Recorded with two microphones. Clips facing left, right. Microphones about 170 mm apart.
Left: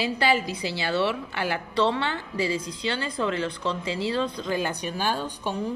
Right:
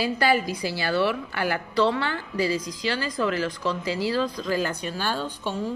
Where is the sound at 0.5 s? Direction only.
25° left (ahead or behind).